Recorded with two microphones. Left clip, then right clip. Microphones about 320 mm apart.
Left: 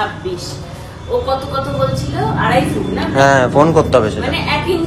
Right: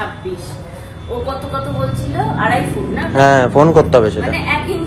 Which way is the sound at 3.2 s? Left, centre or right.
Centre.